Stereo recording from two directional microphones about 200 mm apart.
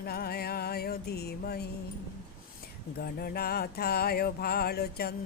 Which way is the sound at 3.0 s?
50° left (ahead or behind).